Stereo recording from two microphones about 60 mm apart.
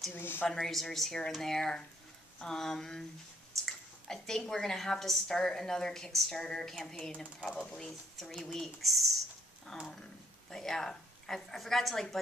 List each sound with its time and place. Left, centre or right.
0.1 s speech: left
0.5 s a woman's voice: centre
3.5 s a sound: centre
4.5 s a woman's voice: centre